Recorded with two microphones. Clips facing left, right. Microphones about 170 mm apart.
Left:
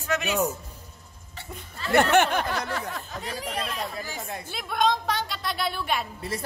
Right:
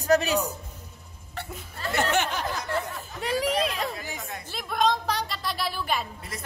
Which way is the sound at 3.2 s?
90° right.